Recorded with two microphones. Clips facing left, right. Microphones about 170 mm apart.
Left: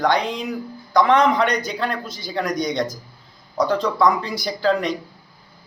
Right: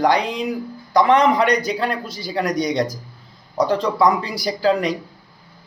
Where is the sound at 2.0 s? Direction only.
35° right (ahead or behind).